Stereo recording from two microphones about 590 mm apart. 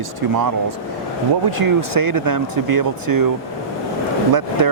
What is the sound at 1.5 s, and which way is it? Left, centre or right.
Speech, right.